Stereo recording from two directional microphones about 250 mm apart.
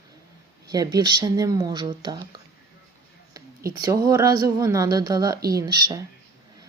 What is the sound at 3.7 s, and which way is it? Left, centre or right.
Speech, centre.